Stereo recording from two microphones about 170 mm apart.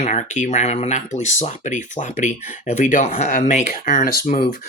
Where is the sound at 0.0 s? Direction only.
45° left (ahead or behind).